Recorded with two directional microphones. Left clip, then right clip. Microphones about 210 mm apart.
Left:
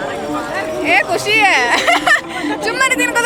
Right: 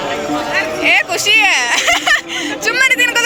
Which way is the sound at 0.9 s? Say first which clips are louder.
Right 1 dB; 10° left (ahead or behind).